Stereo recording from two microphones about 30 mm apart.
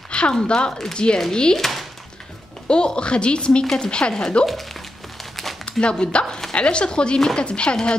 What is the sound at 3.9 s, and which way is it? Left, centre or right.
Speech, left.